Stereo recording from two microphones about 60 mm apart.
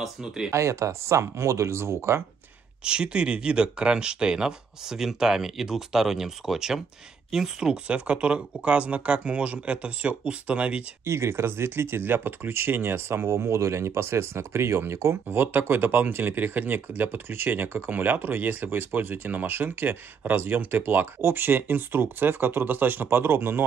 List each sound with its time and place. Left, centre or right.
0.5 s speech: right
2.8 s speech: centre
11.1 s speech: right
13.5 s speech: right